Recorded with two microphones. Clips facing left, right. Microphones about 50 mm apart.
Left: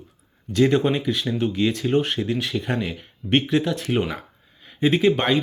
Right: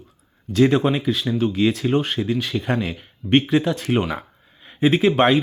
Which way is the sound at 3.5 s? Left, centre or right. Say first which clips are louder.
Right 2 dB; centre.